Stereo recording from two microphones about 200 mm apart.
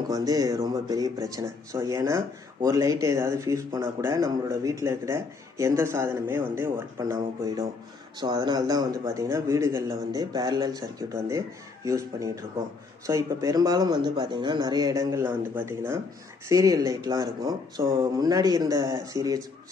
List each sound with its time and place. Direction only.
0.1 s speech: 20° right (ahead or behind)